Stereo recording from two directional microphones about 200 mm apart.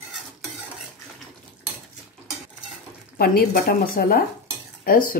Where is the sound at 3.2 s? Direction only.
50° left (ahead or behind).